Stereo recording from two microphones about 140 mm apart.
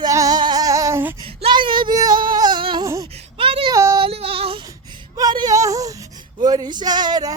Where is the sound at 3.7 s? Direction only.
20° right (ahead or behind).